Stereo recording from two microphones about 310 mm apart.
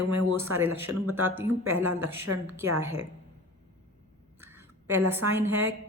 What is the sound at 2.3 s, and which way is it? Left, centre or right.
Speech, right.